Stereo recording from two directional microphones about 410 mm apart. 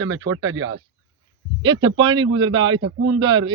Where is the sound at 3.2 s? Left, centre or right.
Centre.